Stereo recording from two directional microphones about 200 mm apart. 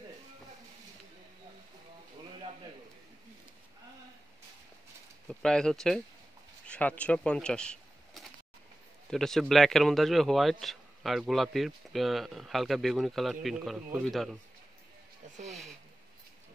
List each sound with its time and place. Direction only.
5.3 s speech: 5° left (ahead or behind)
15.2 s speech: 35° right (ahead or behind)